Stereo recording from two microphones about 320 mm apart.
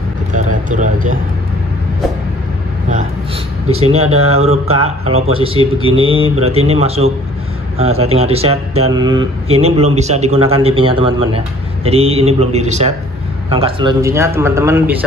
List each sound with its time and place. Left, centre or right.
0.3 s speech: right
3.8 s speech: centre
4.8 s speech: right
5.2 s speech: centre